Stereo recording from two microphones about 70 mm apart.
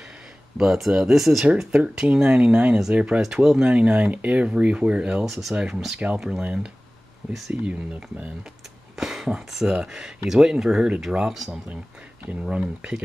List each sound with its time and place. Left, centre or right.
0.6 s speech: centre
5.2 s speech: centre
8.9 s speech: centre